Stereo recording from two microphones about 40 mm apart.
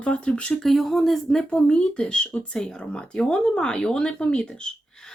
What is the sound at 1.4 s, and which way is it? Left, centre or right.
Speech, left.